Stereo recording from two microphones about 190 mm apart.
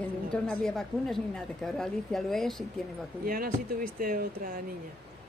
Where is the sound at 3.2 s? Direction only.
50° right (ahead or behind).